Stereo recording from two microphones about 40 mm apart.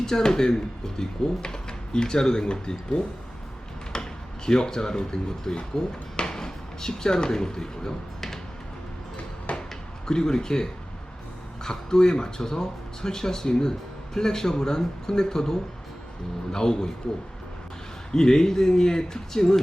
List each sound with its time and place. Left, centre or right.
0.0 s speech: centre
9.5 s a sound: left
10.1 s speech: centre
18.1 s speech: centre